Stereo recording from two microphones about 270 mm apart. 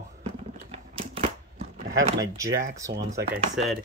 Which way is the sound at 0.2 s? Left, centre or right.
Right.